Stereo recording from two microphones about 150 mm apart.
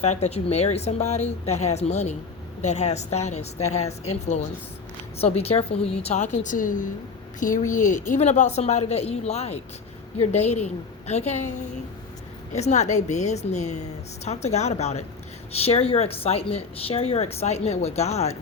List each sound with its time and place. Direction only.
0.0 s a woman's voice: 45° left (ahead or behind)